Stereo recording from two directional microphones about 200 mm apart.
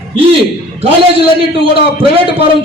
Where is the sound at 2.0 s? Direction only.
25° right (ahead or behind).